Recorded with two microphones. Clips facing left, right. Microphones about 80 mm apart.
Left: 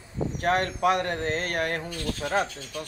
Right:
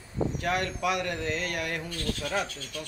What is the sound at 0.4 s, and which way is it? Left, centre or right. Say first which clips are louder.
Speech: left 8 dB; left.